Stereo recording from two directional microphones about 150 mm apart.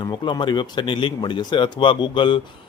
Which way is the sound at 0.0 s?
30° left (ahead or behind).